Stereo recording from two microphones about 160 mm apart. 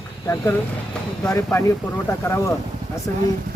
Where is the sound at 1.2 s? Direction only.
15° left (ahead or behind).